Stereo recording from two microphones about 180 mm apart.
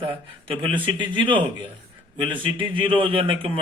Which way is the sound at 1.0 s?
25° right (ahead or behind).